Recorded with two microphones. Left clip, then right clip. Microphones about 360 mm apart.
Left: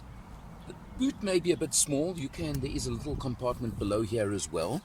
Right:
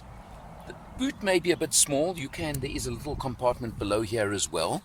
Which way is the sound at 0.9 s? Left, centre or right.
Centre.